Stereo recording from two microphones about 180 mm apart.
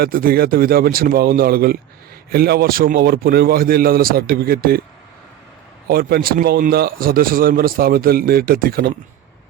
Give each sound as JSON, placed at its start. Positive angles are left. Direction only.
{"t": 0.0, "sound": "a man's voice", "side_deg": -55}
{"t": 5.9, "sound": "a man's voice", "side_deg": -55}